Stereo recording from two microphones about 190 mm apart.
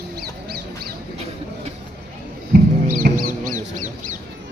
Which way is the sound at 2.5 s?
50° right (ahead or behind).